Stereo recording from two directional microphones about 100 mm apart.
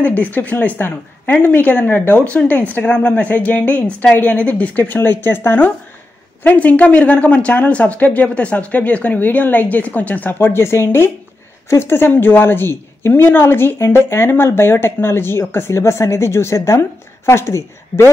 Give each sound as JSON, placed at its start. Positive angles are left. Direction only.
{"t": 0.0, "sound": "a woman's voice", "side_deg": 15}